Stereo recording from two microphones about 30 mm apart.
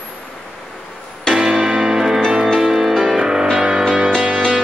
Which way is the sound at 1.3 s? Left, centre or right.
Right.